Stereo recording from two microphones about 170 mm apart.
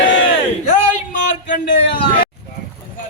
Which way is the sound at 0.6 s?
45° left (ahead or behind).